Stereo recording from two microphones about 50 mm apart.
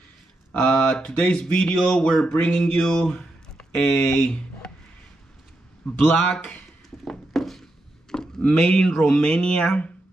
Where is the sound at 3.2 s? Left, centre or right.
Centre.